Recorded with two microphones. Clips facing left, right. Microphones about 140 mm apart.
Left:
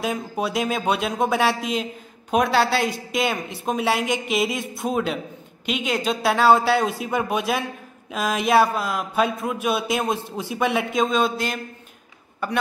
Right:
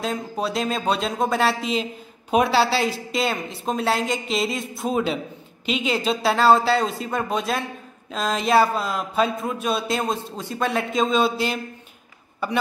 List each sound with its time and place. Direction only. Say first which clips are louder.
0.0 s speech: left 1 dB; 5° left (ahead or behind)